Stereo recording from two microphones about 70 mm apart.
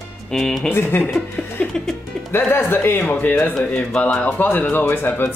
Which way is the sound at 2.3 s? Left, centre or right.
Left.